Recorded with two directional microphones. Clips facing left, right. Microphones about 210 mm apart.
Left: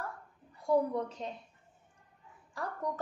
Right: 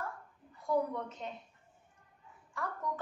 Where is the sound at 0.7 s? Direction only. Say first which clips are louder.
Left 4 dB; 35° left (ahead or behind).